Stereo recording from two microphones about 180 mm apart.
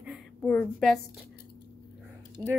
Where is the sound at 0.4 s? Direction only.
5° left (ahead or behind).